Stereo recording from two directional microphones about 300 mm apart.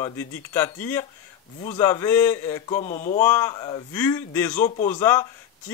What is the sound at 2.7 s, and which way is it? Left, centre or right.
Speech, left.